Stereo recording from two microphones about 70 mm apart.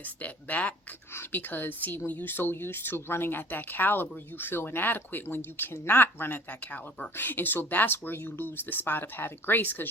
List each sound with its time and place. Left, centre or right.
0.0 s speech: left